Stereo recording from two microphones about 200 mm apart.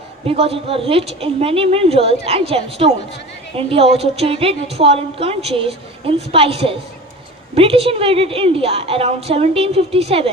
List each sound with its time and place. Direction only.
0.3 s a woman's voice: 30° right (ahead or behind)